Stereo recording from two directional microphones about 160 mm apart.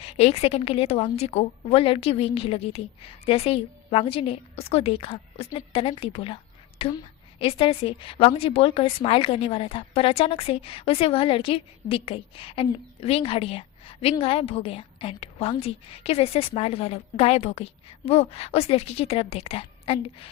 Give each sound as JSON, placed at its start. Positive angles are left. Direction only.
{"t": 0.0, "sound": "a woman's voice", "side_deg": 40}